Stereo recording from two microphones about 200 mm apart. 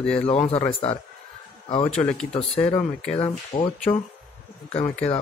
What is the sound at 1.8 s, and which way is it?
Speech, 5° left (ahead or behind).